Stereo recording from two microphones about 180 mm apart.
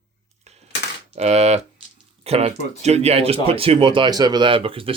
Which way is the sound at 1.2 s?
35° right (ahead or behind).